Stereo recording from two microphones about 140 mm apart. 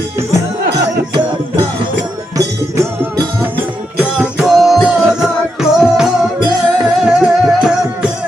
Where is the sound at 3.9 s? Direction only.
10° right (ahead or behind).